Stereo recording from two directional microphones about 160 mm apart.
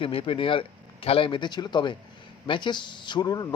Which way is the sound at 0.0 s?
35° left (ahead or behind).